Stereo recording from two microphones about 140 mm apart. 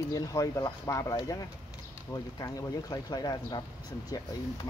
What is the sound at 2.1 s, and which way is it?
Speech, 25° left (ahead or behind).